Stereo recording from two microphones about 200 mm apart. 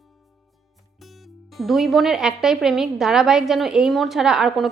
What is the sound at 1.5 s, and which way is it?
A woman's voice, centre (ahead or behind).